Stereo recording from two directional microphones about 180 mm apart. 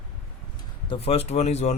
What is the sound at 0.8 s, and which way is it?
Speech, 30° left (ahead or behind).